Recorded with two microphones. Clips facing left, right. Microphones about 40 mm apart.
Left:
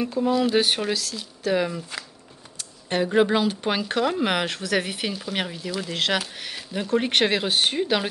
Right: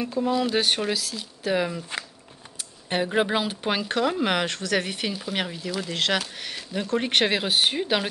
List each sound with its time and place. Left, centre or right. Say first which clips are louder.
0.0 s a woman's voice: left 2 dB; centre
2.9 s a woman's voice: left 3 dB; centre